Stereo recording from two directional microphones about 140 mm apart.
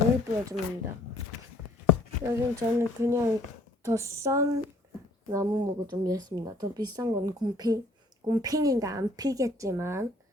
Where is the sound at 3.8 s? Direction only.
20° right (ahead or behind).